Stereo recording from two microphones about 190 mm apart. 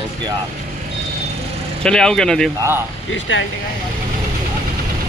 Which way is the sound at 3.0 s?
75° left (ahead or behind).